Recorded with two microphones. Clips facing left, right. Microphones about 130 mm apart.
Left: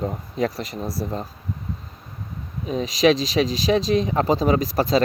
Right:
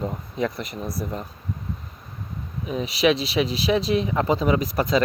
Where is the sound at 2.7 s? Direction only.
35° left (ahead or behind).